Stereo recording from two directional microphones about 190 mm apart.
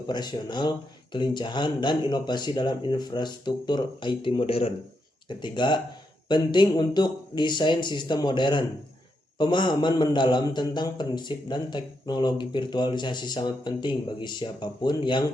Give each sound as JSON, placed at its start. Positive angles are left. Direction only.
{"t": 0.1, "sound": "a man's voice", "side_deg": 20}